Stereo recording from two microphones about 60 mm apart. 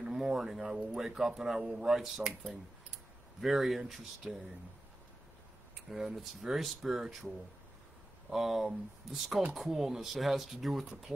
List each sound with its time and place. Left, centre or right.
0.0 s a sound: centre
0.5 s speech: centre
5.9 s speech: centre
8.3 s speech: centre